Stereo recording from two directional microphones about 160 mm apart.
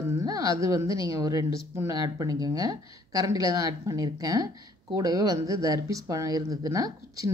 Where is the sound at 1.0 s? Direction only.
20° right (ahead or behind).